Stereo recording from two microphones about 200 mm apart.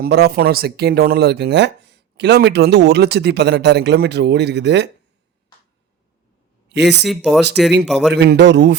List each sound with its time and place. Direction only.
0.0 s speech: 55° right (ahead or behind)
6.7 s speech: 60° right (ahead or behind)
7.1 s speech: centre (ahead or behind)
8.1 s speech: 55° right (ahead or behind)